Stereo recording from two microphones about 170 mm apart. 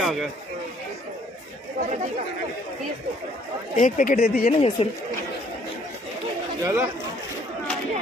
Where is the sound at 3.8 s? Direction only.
50° left (ahead or behind).